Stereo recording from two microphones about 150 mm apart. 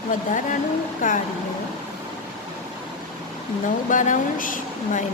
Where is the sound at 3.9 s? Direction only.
60° left (ahead or behind).